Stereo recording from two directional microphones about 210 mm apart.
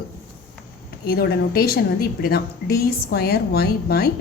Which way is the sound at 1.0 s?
50° left (ahead or behind).